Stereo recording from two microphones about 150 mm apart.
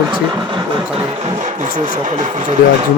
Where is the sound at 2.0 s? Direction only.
55° right (ahead or behind).